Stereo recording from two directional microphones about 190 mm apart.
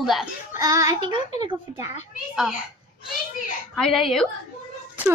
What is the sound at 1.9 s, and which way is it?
Speech, 35° left (ahead or behind).